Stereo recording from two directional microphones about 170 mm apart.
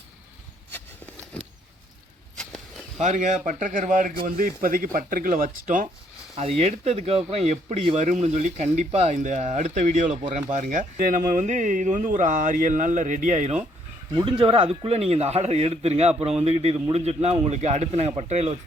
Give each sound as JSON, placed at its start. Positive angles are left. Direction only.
{"t": 0.7, "sound": "a sound", "side_deg": 10}
{"t": 3.0, "sound": "speech", "side_deg": -45}
{"t": 6.3, "sound": "speech", "side_deg": -40}
{"t": 14.1, "sound": "a man's voice", "side_deg": -30}